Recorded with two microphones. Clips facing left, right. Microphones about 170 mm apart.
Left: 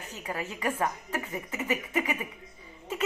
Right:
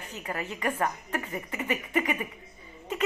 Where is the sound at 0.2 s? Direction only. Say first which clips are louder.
Right 1 dB; 10° left (ahead or behind).